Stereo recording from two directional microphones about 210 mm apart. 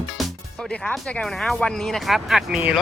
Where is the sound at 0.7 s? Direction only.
5° left (ahead or behind).